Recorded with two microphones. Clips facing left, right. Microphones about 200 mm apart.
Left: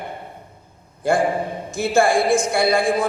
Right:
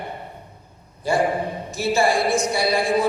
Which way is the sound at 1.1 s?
50° left (ahead or behind).